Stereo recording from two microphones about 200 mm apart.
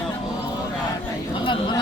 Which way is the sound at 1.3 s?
25° left (ahead or behind).